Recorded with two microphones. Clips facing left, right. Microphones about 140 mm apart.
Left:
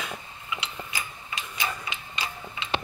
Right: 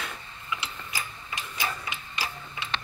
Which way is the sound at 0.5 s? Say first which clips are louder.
Left 1 dB; 20° left (ahead or behind).